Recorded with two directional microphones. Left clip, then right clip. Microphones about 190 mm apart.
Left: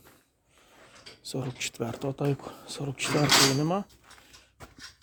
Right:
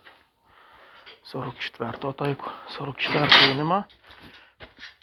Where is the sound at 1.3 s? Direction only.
40° left (ahead or behind).